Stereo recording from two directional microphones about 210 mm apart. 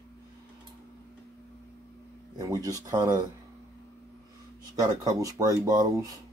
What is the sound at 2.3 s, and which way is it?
Speech, 15° right (ahead or behind).